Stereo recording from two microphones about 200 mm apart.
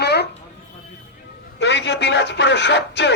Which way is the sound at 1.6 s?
60° left (ahead or behind).